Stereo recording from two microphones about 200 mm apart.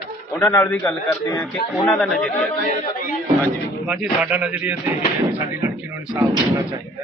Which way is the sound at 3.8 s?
5° right (ahead or behind).